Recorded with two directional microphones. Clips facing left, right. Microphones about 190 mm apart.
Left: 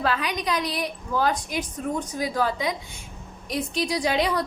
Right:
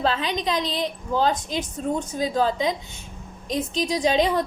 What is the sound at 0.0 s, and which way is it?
A woman's voice, 25° right (ahead or behind).